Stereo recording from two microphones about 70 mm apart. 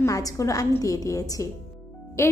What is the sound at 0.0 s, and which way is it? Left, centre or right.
A woman's voice, left.